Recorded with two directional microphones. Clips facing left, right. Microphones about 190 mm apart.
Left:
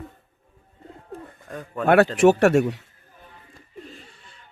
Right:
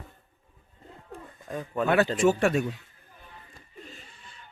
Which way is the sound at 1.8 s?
65° left (ahead or behind).